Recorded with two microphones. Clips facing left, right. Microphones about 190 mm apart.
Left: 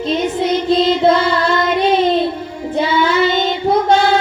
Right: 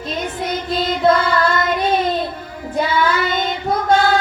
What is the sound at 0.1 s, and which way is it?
Child singing, 25° left (ahead or behind).